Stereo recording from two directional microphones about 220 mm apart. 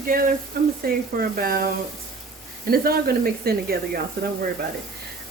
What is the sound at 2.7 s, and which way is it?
A woman's voice, 45° right (ahead or behind).